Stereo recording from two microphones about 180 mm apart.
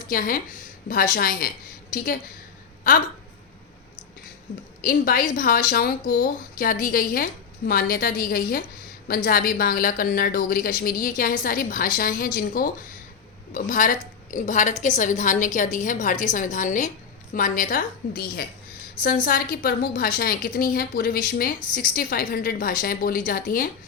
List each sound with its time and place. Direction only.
0.1 s a woman's voice: 50° left (ahead or behind)
4.8 s a woman's voice: 50° left (ahead or behind)